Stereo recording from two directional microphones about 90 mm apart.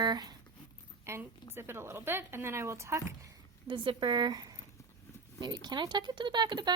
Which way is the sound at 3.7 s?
65° right (ahead or behind).